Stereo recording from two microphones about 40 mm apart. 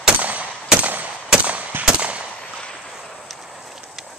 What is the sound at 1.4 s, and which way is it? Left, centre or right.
Gunshot, right.